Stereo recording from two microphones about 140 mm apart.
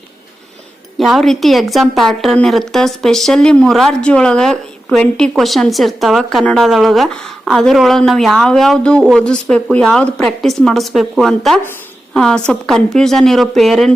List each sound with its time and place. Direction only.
0.9 s a woman's voice: centre (ahead or behind)